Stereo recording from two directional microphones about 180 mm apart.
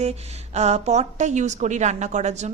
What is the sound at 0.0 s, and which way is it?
A woman's voice, 35° right (ahead or behind).